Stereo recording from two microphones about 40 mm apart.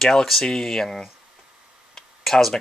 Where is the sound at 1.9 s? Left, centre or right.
Centre.